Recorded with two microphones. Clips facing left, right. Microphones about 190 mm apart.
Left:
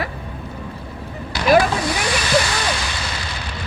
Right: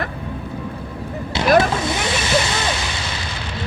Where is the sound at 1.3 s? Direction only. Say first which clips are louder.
Right 1 dB; 25° right (ahead or behind).